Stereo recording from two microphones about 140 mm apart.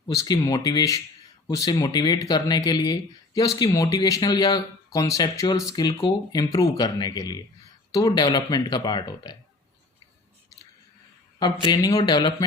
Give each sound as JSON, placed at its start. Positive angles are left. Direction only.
{"t": 0.1, "sound": "speech", "side_deg": 25}
{"t": 11.6, "sound": "speech", "side_deg": 30}